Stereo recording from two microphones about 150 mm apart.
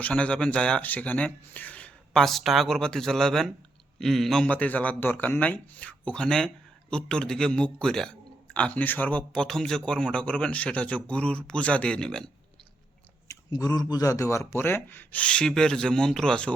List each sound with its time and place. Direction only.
0.0 s a man's voice: 10° left (ahead or behind)
13.2 s a sound: 25° left (ahead or behind)
13.9 s speech: 20° left (ahead or behind); by 16.5 s 5° left (ahead or behind)